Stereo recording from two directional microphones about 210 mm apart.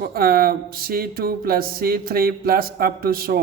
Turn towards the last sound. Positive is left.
turn(degrees=-45)  # may be behind; listen again after turning